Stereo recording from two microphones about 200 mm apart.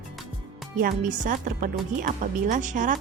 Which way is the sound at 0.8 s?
45° right (ahead or behind).